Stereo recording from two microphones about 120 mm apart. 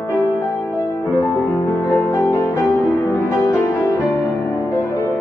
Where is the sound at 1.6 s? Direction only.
25° left (ahead or behind).